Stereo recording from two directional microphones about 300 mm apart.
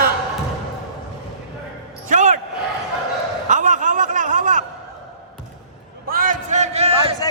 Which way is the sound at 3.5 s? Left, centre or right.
Right.